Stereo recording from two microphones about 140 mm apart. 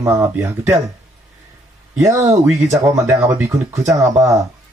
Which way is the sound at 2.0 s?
20° right (ahead or behind).